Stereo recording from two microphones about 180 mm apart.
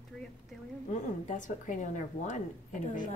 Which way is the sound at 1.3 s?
45° left (ahead or behind).